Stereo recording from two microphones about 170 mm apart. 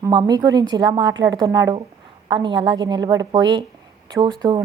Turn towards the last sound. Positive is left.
turn(degrees=-25)  # may be behind; listen again after turning